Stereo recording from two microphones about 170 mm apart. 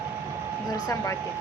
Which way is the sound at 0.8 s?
15° left (ahead or behind).